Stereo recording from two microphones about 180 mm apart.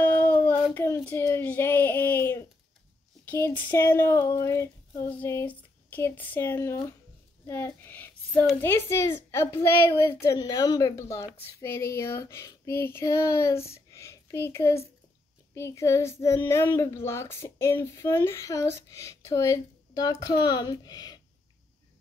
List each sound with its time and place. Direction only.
0.0 s a sound: 10° left (ahead or behind)
0.7 s speech: 10° left (ahead or behind)
7.4 s child singing: 10° left (ahead or behind)
8.5 s speech: 10° left (ahead or behind)
13.8 s a sound: 15° left (ahead or behind)
15.5 s speech: 15° left (ahead or behind)